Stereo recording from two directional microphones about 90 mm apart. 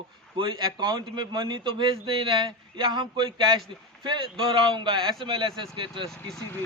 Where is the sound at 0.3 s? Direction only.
60° right (ahead or behind).